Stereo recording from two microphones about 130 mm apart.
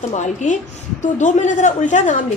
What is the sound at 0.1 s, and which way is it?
A woman's voice, 70° left (ahead or behind).